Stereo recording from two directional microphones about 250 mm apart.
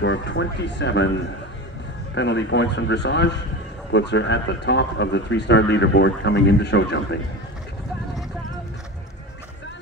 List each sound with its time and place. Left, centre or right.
0.0 s speech: left